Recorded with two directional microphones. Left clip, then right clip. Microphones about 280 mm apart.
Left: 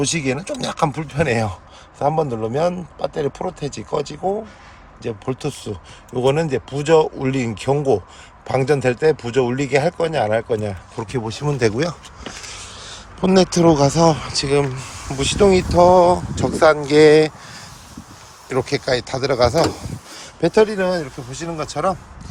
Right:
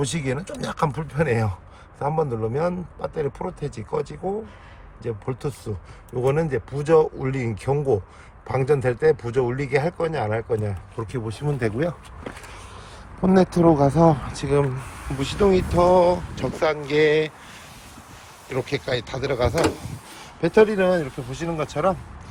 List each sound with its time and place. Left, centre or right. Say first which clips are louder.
0.0 s speech: left 5 dB; centre
18.4 s speech: left 6 dB; centre